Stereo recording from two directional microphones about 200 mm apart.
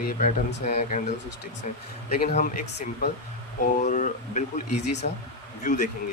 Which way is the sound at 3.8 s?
40° left (ahead or behind).